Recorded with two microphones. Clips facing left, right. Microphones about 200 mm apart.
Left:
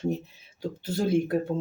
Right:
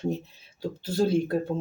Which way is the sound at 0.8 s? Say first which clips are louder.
Right 2 dB; 20° left (ahead or behind).